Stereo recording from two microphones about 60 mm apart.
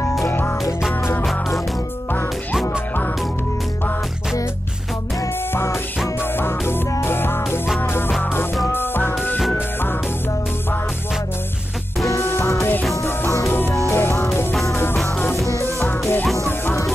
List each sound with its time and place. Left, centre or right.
5.5 s music: left
12.0 s music: left
12.3 s music: left
13.3 s music: left
13.8 s music: left